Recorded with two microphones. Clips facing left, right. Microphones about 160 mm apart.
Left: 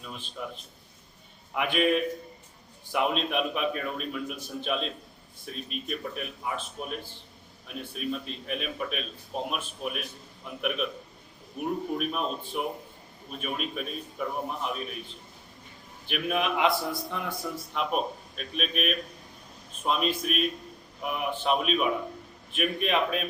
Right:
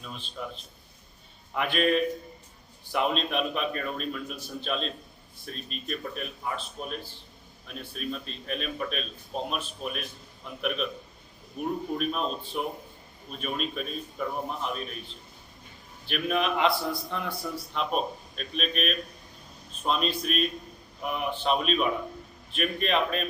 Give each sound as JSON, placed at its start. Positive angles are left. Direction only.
{"t": 0.0, "sound": "a man's voice", "side_deg": 5}
{"t": 1.5, "sound": "a man's voice", "side_deg": 10}
{"t": 16.0, "sound": "a man's voice", "side_deg": 10}